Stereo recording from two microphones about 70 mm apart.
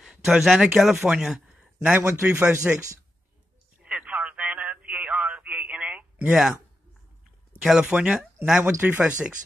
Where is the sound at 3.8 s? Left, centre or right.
Centre.